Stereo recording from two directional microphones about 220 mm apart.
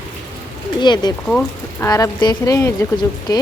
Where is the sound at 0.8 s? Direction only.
20° left (ahead or behind).